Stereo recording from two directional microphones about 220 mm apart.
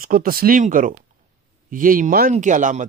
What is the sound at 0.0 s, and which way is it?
Speech, 40° right (ahead or behind).